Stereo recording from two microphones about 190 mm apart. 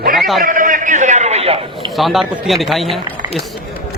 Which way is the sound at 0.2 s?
Centre (ahead or behind).